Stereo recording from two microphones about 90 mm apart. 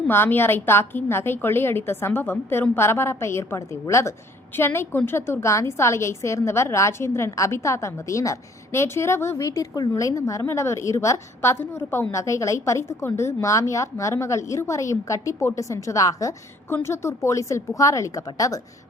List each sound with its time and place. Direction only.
0.1 s a woman's voice: 25° left (ahead or behind)
16.6 s a woman's voice: 30° left (ahead or behind)